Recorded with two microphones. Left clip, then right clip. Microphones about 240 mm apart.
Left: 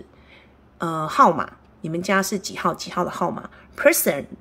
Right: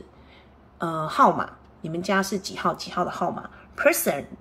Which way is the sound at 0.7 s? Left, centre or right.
Centre.